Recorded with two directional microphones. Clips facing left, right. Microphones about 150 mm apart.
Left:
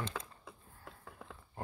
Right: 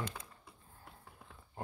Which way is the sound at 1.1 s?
90° left.